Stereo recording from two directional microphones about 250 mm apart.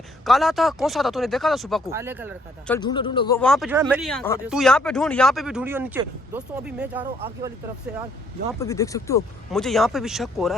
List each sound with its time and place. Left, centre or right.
0.3 s speech: centre
2.6 s a man's voice: centre
3.4 s speech: centre
7.0 s speech: right
8.5 s a man's voice: centre
9.5 s speech: centre